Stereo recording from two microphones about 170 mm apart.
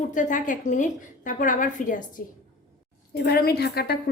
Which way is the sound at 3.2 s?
65° left (ahead or behind).